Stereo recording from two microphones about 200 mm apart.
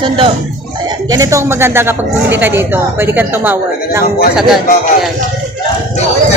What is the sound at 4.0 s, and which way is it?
Speech, 50° left (ahead or behind).